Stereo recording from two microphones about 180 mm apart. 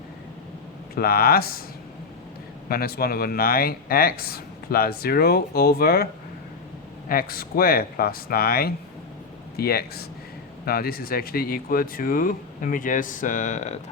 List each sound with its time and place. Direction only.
0.9 s speech: 55° left (ahead or behind)
2.6 s speech: 55° left (ahead or behind)
7.1 s speech: 55° left (ahead or behind)